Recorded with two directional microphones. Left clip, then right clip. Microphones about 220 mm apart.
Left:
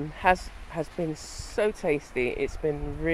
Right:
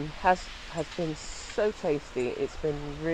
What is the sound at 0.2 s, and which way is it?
Speech, 15° left (ahead or behind).